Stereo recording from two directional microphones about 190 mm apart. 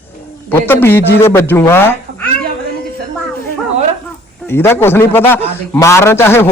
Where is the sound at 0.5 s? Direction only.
10° left (ahead or behind).